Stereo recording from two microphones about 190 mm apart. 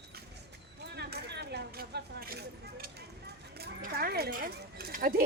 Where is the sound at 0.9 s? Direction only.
60° right (ahead or behind).